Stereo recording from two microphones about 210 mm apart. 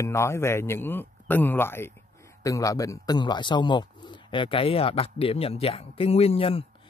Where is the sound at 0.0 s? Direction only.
15° left (ahead or behind).